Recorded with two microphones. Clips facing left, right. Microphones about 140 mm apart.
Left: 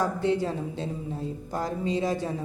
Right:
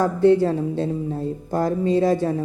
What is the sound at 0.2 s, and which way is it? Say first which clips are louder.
A woman's voice: right 10 dB; 50° right (ahead or behind).